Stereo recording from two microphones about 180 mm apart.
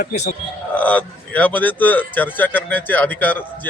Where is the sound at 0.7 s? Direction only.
10° left (ahead or behind).